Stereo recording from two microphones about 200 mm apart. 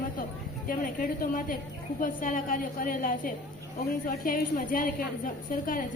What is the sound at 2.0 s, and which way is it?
A woman's voice, 40° left (ahead or behind).